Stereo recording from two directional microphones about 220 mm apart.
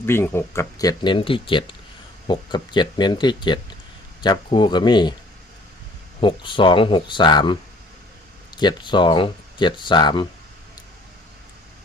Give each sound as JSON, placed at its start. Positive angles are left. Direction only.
{"t": 0.0, "sound": "speech", "side_deg": 10}
{"t": 6.1, "sound": "speech", "side_deg": 20}